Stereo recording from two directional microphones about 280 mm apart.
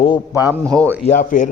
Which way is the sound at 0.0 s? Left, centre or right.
Centre.